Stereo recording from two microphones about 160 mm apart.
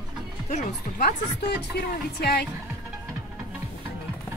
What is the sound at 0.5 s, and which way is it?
Speech, 45° left (ahead or behind).